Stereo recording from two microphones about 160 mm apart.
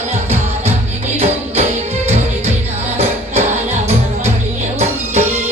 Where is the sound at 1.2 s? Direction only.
40° right (ahead or behind).